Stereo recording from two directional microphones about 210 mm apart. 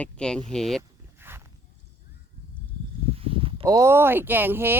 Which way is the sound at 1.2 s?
10° right (ahead or behind).